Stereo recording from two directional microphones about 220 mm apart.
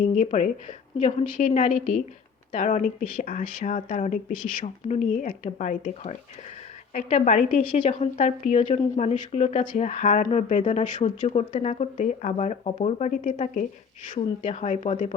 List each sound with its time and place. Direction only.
0.0 s a woman's voice: 30° left (ahead or behind)